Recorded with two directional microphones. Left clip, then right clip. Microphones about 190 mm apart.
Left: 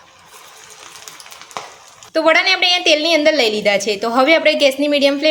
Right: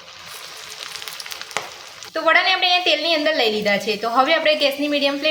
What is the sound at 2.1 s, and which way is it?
A woman's voice, 45° left (ahead or behind).